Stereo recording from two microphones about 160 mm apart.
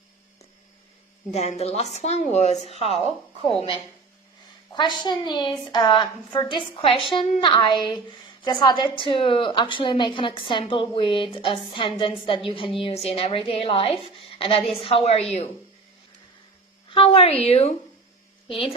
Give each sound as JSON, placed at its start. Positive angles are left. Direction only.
{"t": 1.3, "sound": "a woman's voice", "side_deg": 45}
{"t": 4.7, "sound": "a woman's voice", "side_deg": 30}
{"t": 16.9, "sound": "a woman's voice", "side_deg": 35}